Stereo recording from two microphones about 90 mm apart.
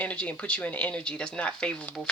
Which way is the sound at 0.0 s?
15° left (ahead or behind).